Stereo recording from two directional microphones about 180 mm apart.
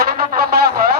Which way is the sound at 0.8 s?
60° right (ahead or behind).